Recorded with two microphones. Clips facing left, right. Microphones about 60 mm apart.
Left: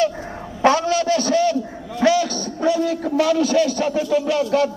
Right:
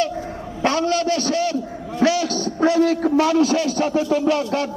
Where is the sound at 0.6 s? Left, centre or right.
Centre.